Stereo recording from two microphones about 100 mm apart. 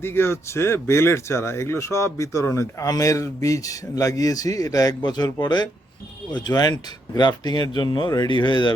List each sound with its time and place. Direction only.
0.0 s speech: 25° left (ahead or behind); by 8.7 s 50° left (ahead or behind)